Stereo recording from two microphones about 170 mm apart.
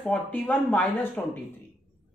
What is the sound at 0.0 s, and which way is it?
Speech, 10° left (ahead or behind).